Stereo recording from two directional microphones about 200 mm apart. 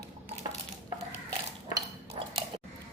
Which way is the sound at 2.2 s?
25° right (ahead or behind).